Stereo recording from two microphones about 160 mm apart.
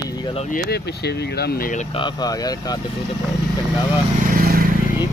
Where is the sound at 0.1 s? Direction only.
25° left (ahead or behind).